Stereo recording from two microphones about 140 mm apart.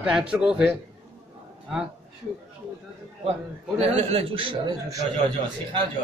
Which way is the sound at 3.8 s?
50° right (ahead or behind).